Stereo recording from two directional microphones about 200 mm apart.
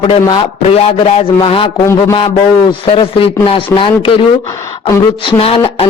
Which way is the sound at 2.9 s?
25° left (ahead or behind).